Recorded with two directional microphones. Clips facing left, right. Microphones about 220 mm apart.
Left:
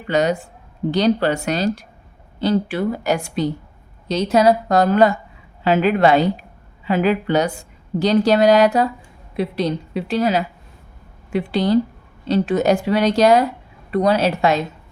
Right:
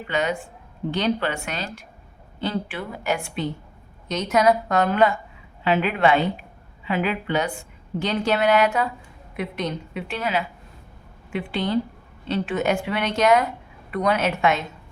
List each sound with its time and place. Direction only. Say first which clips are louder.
0.1 s speech: left 7 dB; 40° left (ahead or behind)